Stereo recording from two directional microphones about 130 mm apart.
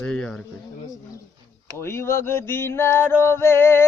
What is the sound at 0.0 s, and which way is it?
Insect, 5° left (ahead or behind).